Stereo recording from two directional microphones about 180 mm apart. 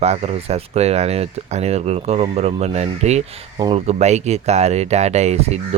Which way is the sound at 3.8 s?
40° right (ahead or behind).